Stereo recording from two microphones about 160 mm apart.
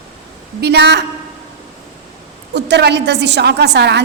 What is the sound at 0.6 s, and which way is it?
Speech, 90° right.